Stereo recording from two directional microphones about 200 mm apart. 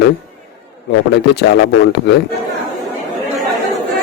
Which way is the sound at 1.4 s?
55° left (ahead or behind).